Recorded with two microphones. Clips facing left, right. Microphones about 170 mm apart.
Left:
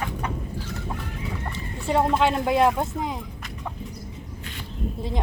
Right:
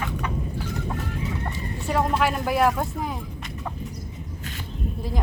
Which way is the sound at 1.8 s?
25° left (ahead or behind).